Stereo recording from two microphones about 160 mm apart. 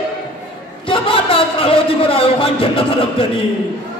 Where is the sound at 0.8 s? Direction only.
35° left (ahead or behind).